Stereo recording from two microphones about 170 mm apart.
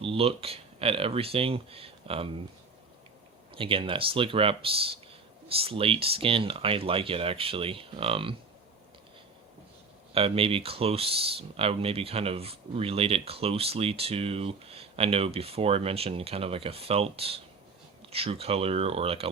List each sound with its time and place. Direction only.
0.0 s speech: 35° right (ahead or behind)
3.5 s speech: 30° right (ahead or behind)
10.2 s speech: 35° right (ahead or behind)